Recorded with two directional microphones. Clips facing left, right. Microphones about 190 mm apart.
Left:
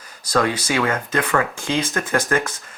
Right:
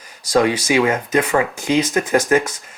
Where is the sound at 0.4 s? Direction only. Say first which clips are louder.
Right 5 dB; 10° right (ahead or behind).